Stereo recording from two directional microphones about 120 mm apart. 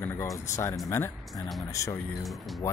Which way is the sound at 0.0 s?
20° left (ahead or behind).